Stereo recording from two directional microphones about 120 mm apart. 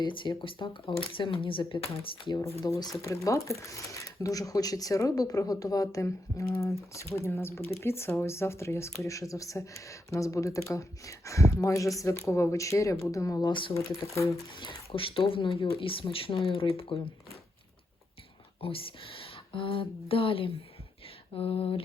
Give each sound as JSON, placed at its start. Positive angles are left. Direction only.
{"t": 0.0, "sound": "speech", "side_deg": 40}
{"t": 2.6, "sound": "speech", "side_deg": 25}
{"t": 13.5, "sound": "speech", "side_deg": 45}
{"t": 14.1, "sound": "speech", "side_deg": 25}
{"t": 14.6, "sound": "speech", "side_deg": 50}
{"t": 18.6, "sound": "speech", "side_deg": 50}